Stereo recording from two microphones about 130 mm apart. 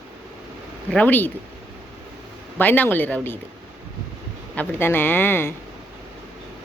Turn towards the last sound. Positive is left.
turn(degrees=20)  # may be behind; listen again after turning